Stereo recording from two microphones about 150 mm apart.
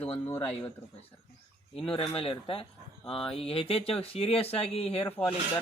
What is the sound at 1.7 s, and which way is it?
Speech, 35° left (ahead or behind).